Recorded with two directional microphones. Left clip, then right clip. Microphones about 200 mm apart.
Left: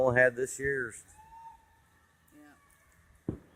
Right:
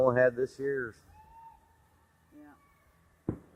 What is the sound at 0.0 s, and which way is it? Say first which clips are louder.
Speech: even; 15° left (ahead or behind).